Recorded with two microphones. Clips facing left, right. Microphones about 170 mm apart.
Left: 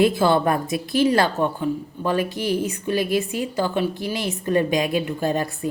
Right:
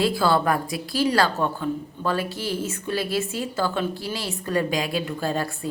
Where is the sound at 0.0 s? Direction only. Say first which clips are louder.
Left 3 dB; 20° left (ahead or behind).